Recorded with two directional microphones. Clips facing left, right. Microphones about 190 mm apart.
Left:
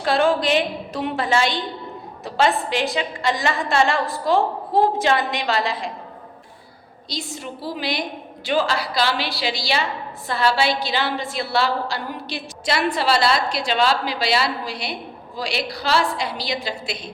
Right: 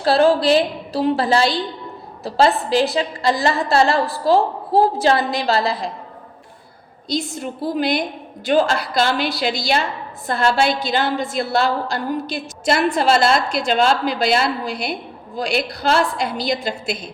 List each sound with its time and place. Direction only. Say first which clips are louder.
0.0 s a woman's voice: right 4 dB; 35° right (ahead or behind)
7.1 s a woman's voice: right 7 dB; 50° right (ahead or behind)